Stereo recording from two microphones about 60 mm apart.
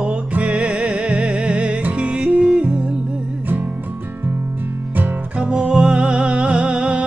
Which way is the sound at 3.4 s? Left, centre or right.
Right.